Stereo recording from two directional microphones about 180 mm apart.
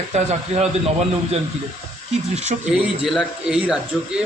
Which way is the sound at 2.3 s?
40° right (ahead or behind).